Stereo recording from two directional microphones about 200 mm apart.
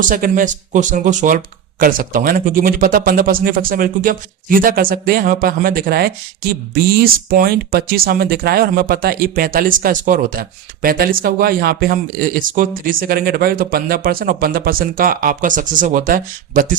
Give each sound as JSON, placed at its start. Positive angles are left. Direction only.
{"t": 0.0, "sound": "speech", "side_deg": -40}